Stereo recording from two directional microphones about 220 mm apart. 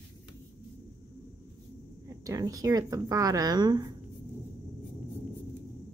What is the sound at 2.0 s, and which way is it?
Speech, 15° right (ahead or behind).